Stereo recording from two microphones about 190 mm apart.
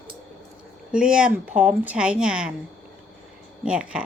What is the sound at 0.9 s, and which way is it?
Speech, 5° right (ahead or behind).